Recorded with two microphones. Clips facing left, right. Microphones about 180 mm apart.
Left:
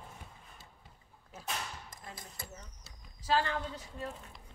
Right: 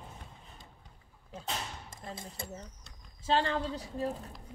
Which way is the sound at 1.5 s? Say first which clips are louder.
Right 1 dB; 25° right (ahead or behind).